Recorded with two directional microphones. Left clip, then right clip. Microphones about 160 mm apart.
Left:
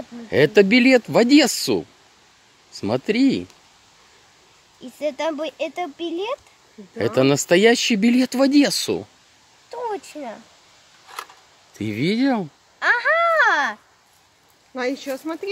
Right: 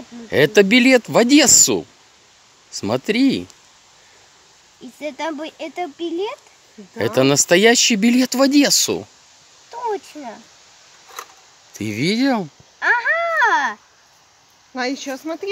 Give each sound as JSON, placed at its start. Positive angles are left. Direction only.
{"t": 0.3, "sound": "speech", "side_deg": -5}
{"t": 5.0, "sound": "speech", "side_deg": 5}
{"t": 7.0, "sound": "speech", "side_deg": -5}
{"t": 11.7, "sound": "a sound", "side_deg": -5}
{"t": 14.7, "sound": "speech", "side_deg": -60}